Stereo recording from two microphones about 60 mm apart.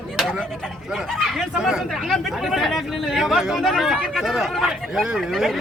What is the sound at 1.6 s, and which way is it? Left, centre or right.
Speech, centre.